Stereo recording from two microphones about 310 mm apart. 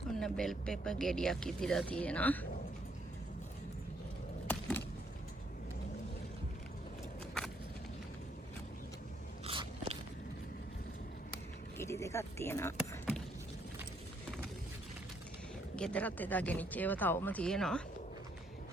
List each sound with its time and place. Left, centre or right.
0.2 s speech: centre
9.5 s biting: centre
11.8 s a sound: centre
15.7 s speech: centre